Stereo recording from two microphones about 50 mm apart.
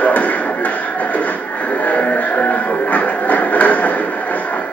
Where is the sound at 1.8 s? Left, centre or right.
Left.